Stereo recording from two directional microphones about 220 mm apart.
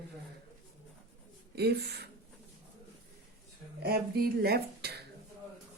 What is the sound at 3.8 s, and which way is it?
Speech, 45° right (ahead or behind).